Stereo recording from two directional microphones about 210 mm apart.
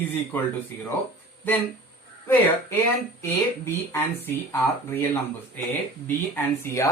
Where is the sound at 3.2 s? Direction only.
15° left (ahead or behind).